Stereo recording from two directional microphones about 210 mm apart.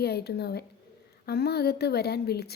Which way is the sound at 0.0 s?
50° left (ahead or behind).